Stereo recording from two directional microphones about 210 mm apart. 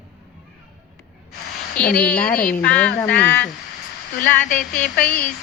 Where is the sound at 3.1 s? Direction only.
50° left (ahead or behind).